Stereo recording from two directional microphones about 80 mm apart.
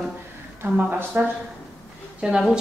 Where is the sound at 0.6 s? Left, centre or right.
Right.